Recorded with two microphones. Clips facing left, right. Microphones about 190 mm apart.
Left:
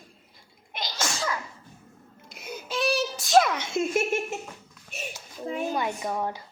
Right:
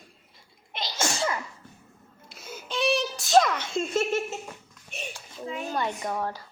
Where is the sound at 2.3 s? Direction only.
15° left (ahead or behind).